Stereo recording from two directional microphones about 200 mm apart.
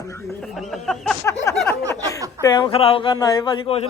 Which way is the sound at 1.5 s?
15° left (ahead or behind).